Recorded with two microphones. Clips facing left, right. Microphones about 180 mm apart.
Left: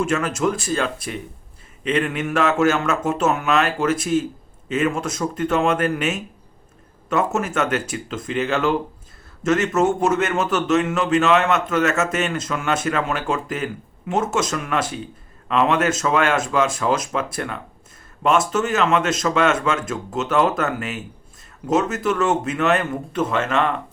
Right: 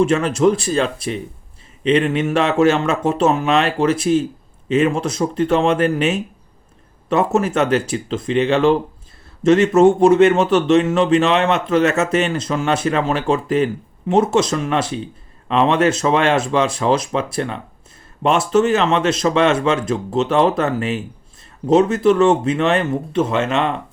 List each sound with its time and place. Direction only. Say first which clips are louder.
0.0 s a man's voice: right 6 dB; 30° right (ahead or behind)